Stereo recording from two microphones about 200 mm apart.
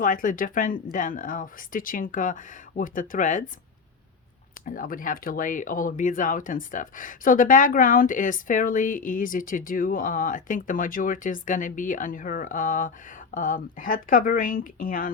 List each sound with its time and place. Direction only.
0.0 s speech: 40° left (ahead or behind)
4.6 s speech: 45° left (ahead or behind)